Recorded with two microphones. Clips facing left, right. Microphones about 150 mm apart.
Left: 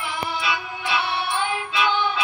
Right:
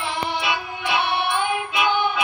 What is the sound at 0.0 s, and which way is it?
Music, 25° right (ahead or behind).